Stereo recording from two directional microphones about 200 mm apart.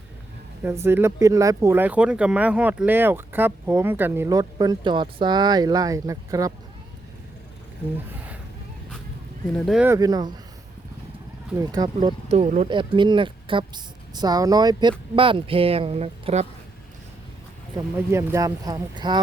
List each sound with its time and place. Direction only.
0.6 s speech: 10° right (ahead or behind)
9.6 s speech: 5° right (ahead or behind)
9.9 s speech: 20° right (ahead or behind)
11.5 s speech: 20° right (ahead or behind)
17.9 s speech: 10° right (ahead or behind)